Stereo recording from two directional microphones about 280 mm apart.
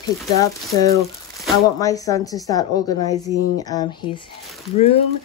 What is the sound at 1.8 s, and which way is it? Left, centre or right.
Speech, centre.